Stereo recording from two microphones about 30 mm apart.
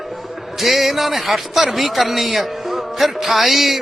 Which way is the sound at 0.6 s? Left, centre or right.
Centre.